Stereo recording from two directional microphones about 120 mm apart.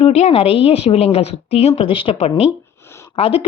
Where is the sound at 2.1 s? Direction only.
60° left (ahead or behind).